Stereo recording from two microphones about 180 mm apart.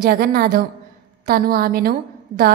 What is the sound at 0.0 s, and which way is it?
A woman's voice, 55° right (ahead or behind).